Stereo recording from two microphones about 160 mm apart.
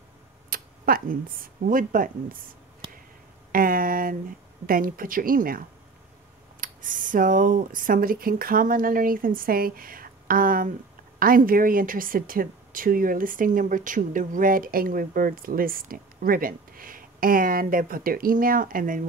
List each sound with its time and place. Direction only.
0.5 s speech: 65° right (ahead or behind)
3.5 s a sound: 60° right (ahead or behind)
4.6 s a woman's voice: 60° right (ahead or behind)
6.6 s a woman's voice: 55° right (ahead or behind)